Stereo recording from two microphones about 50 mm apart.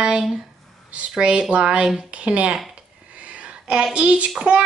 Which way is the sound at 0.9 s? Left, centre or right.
Right.